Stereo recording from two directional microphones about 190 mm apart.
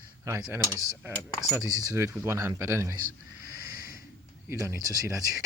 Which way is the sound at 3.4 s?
15° right (ahead or behind).